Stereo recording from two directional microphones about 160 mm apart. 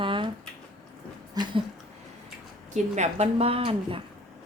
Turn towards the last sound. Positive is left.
turn(degrees=-35)  # may be behind; listen again after turning